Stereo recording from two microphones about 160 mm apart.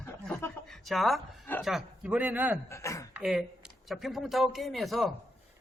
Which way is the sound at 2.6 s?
20° left (ahead or behind).